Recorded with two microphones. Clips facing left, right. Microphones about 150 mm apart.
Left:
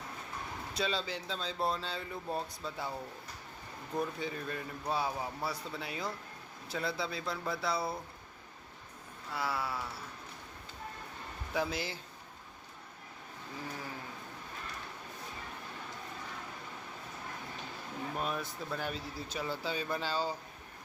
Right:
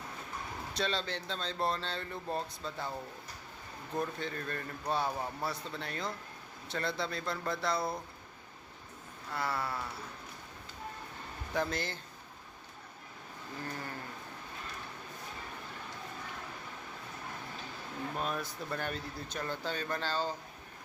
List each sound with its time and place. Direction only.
0.7 s speech: 5° left (ahead or behind)
3.9 s a man's voice: 5° left (ahead or behind)
9.3 s speech: 5° left (ahead or behind)
11.5 s speech: 5° left (ahead or behind)
13.6 s sheep: centre (ahead or behind)
18.2 s speech: centre (ahead or behind)